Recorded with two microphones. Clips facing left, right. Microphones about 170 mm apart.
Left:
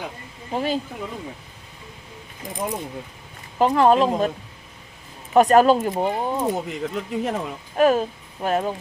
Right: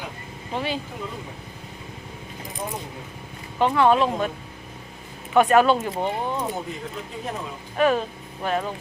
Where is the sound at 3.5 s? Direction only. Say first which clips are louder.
Left 2 dB; 40° left (ahead or behind).